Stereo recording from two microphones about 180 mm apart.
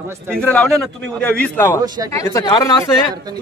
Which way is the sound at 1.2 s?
5° left (ahead or behind).